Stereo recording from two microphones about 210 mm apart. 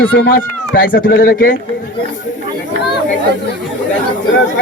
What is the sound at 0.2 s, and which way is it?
Speech, 45° left (ahead or behind).